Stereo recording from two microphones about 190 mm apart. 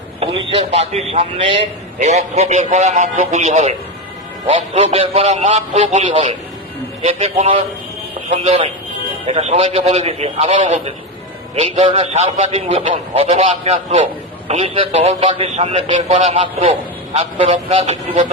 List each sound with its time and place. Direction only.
0.2 s a man's voice: 30° right (ahead or behind)
17.7 s a man's voice: 30° right (ahead or behind)